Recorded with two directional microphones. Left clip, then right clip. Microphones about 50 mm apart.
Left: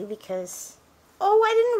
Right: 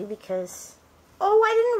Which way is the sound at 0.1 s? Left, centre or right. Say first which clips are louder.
Right 3 dB; left.